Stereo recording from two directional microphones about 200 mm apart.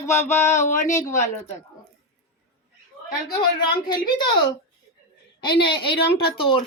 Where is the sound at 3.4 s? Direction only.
20° left (ahead or behind).